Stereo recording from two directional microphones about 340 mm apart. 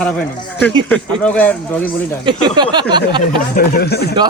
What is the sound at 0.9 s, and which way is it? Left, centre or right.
Speech, centre.